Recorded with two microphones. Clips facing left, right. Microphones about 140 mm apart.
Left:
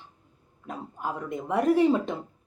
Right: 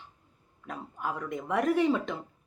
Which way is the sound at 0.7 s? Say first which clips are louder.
Left 2 dB; 25° left (ahead or behind).